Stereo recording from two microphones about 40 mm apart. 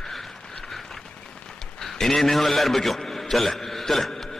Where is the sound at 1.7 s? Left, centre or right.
Centre.